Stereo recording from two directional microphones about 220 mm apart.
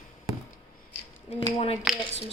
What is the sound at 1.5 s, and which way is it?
Speech, 25° left (ahead or behind).